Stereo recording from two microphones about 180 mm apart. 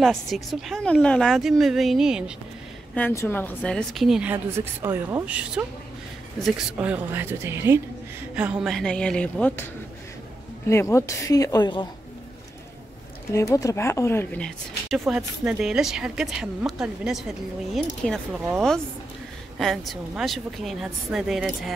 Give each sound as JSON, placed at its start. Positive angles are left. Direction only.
{"t": 0.0, "sound": "speech", "side_deg": 0}
{"t": 2.9, "sound": "speech", "side_deg": 10}
{"t": 10.7, "sound": "a woman's voice", "side_deg": 15}
{"t": 13.3, "sound": "speech", "side_deg": 15}
{"t": 14.9, "sound": "speech", "side_deg": -5}
{"t": 19.6, "sound": "speech", "side_deg": 0}